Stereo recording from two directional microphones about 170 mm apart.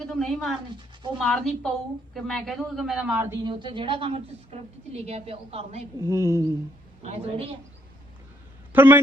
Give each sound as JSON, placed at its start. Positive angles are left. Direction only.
{"t": 0.0, "sound": "a woman's voice", "side_deg": 0}
{"t": 3.4, "sound": "a woman's voice", "side_deg": -30}
{"t": 6.0, "sound": "speech", "side_deg": -20}
{"t": 7.0, "sound": "a woman's voice", "side_deg": -35}
{"t": 8.7, "sound": "a man's voice", "side_deg": -10}